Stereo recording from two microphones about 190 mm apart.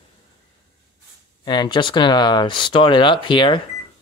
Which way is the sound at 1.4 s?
20° left (ahead or behind).